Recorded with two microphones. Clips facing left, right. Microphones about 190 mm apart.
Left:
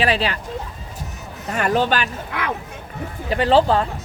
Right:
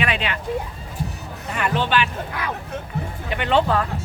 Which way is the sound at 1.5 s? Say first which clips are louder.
Left 3 dB; 40° left (ahead or behind).